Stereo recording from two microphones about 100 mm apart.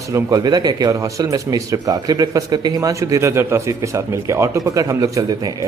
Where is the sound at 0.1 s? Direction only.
40° right (ahead or behind).